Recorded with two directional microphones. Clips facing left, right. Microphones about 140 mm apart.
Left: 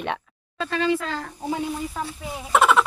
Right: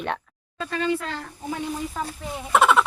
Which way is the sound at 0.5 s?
90° left.